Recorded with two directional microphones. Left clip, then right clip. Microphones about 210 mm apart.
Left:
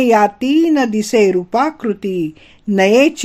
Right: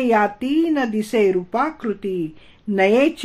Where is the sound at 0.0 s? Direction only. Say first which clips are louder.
Left 6 dB; 35° left (ahead or behind).